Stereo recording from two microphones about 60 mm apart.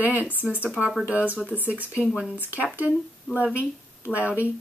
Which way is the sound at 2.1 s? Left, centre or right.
Centre.